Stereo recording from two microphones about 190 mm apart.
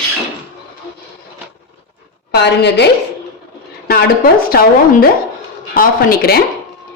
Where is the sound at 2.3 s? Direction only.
60° left (ahead or behind).